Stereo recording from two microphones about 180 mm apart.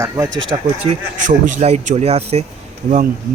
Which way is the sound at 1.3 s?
40° right (ahead or behind).